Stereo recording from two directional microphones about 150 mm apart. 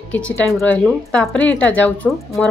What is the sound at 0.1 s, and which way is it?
A woman's voice, 10° left (ahead or behind).